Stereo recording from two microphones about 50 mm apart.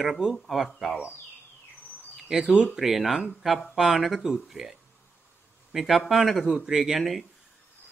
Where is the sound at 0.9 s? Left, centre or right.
Left.